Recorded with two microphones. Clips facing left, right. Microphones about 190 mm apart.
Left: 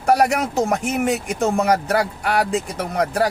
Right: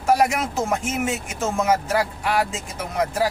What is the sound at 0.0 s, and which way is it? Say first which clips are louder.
Speech: left 2 dB; 65° left (ahead or behind).